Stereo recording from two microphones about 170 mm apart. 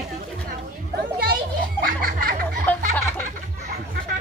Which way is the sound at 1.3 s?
60° right (ahead or behind).